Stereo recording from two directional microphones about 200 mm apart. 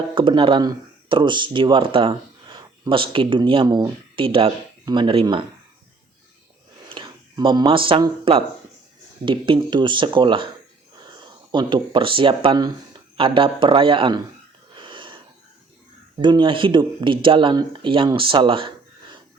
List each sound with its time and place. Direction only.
0.1 s speech: 25° right (ahead or behind)
6.8 s speech: 25° right (ahead or behind)
14.8 s wheeze: 25° right (ahead or behind)
16.1 s speech: 20° right (ahead or behind)